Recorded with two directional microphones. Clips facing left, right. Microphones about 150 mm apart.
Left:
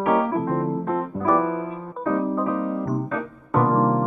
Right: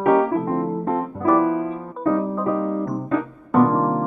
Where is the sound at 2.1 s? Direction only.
Centre (ahead or behind).